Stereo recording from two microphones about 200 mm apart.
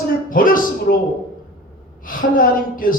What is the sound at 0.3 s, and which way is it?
Speech, 45° left (ahead or behind).